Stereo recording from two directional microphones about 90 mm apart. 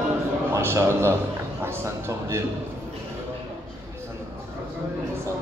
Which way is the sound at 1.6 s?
30° right (ahead or behind).